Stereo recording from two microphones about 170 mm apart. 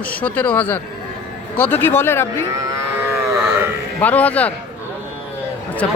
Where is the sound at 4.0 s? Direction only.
10° left (ahead or behind).